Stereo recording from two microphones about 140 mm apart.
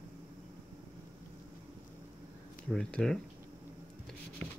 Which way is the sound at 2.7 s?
5° left (ahead or behind).